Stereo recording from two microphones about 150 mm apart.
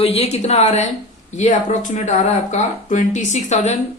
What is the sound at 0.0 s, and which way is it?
Speech, 45° left (ahead or behind).